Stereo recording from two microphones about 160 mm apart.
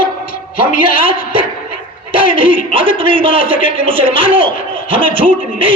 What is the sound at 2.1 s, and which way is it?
A man's voice, 35° right (ahead or behind).